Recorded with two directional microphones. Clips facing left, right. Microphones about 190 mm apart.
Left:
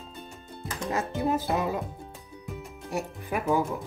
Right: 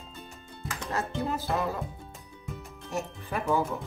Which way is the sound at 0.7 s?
15° left (ahead or behind).